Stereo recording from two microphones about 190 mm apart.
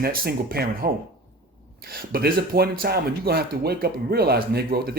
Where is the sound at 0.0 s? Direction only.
50° right (ahead or behind).